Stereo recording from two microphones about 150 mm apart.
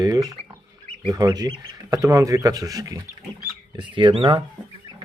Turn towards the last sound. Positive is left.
turn(degrees=-35)  # may be behind; listen again after turning